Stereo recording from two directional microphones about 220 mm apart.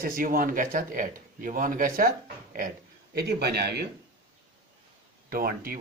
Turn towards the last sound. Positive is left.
turn(degrees=-40)  # may be behind; listen again after turning